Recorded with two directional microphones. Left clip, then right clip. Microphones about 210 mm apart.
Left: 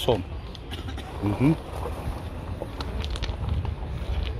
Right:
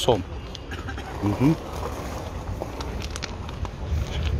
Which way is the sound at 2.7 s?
10° left (ahead or behind).